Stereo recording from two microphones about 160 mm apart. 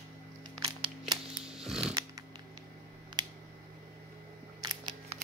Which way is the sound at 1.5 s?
5° right (ahead or behind).